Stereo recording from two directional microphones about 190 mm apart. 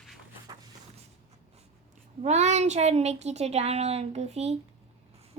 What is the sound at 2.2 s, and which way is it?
A woman's voice, 35° right (ahead or behind).